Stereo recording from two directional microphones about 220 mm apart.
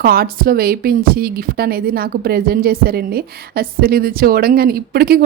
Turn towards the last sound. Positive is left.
turn(degrees=-45)  # may be behind; listen again after turning